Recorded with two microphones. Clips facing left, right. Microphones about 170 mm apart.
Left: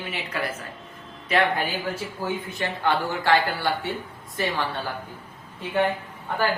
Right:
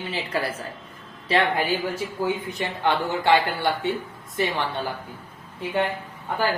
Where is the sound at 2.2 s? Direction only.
15° right (ahead or behind).